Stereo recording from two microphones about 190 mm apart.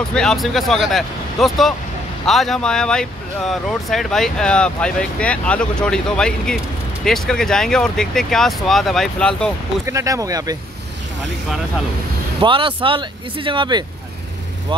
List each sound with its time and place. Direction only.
0.1 s speech: 5° left (ahead or behind)
9.8 s speech: 15° right (ahead or behind)
12.4 s speech: 25° right (ahead or behind)